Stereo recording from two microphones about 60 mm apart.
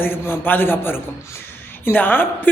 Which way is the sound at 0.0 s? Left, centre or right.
Left.